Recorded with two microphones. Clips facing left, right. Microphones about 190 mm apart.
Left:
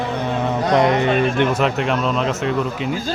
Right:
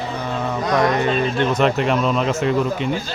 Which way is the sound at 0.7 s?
20° left (ahead or behind).